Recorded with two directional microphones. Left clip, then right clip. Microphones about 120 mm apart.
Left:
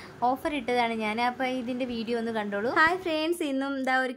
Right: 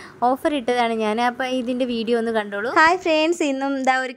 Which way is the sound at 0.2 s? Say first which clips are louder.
Right 7 dB; 55° right (ahead or behind).